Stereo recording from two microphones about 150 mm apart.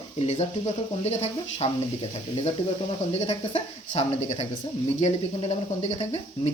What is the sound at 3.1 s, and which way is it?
Speech, 40° left (ahead or behind).